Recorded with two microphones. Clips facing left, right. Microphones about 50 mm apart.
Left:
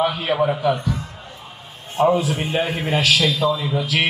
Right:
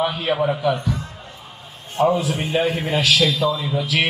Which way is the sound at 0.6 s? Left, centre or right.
Left.